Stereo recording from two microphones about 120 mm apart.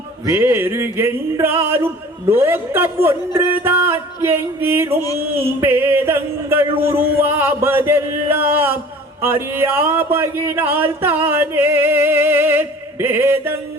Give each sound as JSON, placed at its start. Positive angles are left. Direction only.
{"t": 0.3, "sound": "music", "side_deg": -20}
{"t": 9.2, "sound": "speech", "side_deg": -20}